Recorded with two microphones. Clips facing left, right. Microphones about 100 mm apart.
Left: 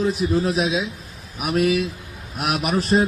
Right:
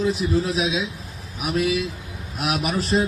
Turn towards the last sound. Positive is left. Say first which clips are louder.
# left 3 dB
turn(degrees=50)  # may be behind; listen again after turning